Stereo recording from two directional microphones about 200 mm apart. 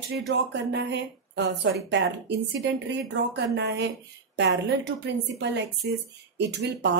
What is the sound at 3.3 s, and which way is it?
Speech, 60° right (ahead or behind).